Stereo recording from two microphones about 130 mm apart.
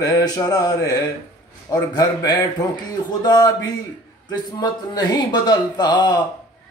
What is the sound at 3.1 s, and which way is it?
Speech, 30° left (ahead or behind).